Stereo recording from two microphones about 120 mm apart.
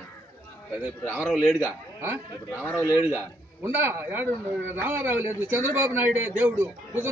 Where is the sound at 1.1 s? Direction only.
5° right (ahead or behind).